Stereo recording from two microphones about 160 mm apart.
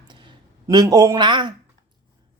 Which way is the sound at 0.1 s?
30° right (ahead or behind).